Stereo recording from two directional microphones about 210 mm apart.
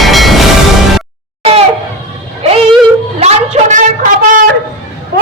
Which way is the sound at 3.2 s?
30° right (ahead or behind).